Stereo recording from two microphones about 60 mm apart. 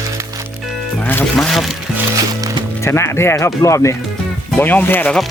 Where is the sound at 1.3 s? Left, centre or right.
Centre.